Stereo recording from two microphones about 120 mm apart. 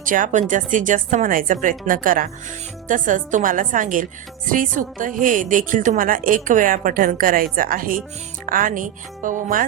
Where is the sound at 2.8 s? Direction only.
90° right.